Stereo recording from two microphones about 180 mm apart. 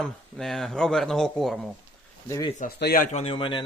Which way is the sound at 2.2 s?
15° left (ahead or behind).